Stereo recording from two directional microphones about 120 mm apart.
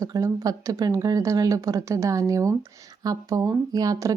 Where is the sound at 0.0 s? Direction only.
30° right (ahead or behind).